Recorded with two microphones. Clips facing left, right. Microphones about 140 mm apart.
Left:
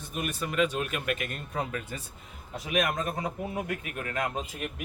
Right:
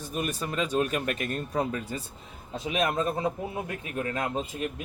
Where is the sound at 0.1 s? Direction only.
35° right (ahead or behind).